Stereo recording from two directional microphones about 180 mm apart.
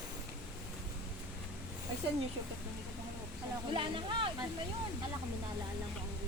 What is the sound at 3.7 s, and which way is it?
Speech, 25° right (ahead or behind).